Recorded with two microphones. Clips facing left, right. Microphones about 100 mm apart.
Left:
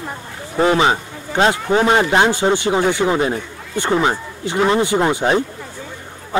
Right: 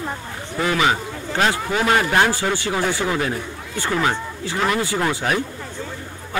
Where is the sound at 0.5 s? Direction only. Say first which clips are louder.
Left 5 dB; 30° left (ahead or behind).